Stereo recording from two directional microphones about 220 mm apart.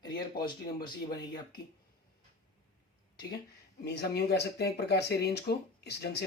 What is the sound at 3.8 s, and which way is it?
Speech, 50° left (ahead or behind).